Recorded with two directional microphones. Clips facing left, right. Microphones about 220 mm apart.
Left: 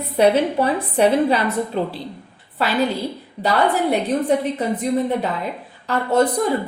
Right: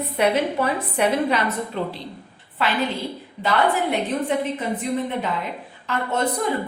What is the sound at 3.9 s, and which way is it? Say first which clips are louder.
Speech: left 4 dB; 35° left (ahead or behind).